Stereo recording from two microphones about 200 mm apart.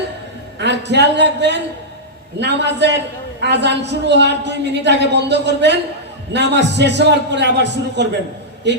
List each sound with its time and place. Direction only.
0.6 s a woman's voice: 60° right (ahead or behind)